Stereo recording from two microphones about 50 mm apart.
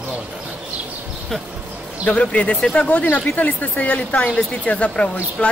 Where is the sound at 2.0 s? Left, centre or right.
Left.